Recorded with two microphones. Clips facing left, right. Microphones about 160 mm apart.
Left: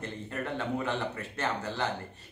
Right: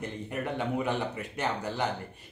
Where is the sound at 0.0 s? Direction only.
15° right (ahead or behind).